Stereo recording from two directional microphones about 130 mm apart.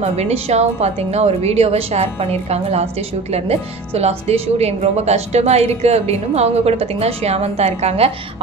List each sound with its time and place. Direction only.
0.2 s speech: 55° right (ahead or behind)